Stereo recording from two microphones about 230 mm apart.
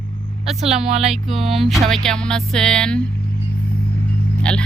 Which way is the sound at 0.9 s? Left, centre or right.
Right.